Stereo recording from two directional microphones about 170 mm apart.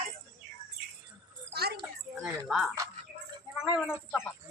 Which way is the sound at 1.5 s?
65° right (ahead or behind).